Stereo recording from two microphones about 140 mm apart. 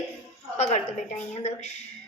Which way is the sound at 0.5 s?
55° left (ahead or behind).